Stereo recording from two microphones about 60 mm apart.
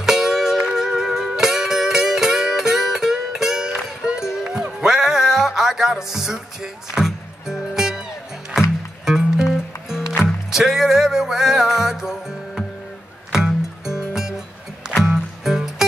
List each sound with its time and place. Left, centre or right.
0.0 s music: centre
15.4 s music: centre